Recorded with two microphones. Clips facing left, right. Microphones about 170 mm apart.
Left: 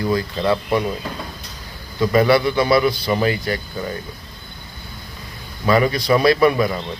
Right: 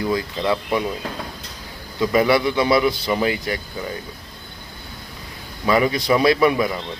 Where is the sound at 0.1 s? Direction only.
15° right (ahead or behind).